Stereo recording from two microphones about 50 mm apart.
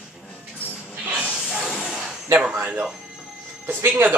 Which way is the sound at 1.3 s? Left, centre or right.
Centre.